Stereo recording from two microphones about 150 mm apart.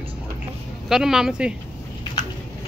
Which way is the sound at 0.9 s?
5° right (ahead or behind).